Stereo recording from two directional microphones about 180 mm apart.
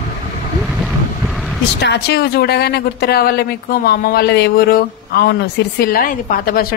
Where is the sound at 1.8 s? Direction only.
70° left (ahead or behind).